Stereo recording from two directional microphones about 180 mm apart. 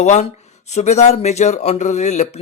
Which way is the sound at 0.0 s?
40° left (ahead or behind).